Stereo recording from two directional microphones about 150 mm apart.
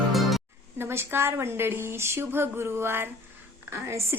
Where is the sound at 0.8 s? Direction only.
15° right (ahead or behind).